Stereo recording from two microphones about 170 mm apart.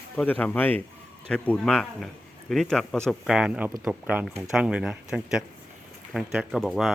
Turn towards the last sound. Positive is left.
turn(degrees=0)  # may be behind; listen again after turning